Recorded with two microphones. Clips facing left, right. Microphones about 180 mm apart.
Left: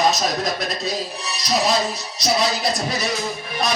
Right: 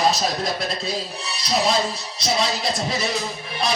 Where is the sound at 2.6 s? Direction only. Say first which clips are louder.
Left 1 dB; 25° right (ahead or behind).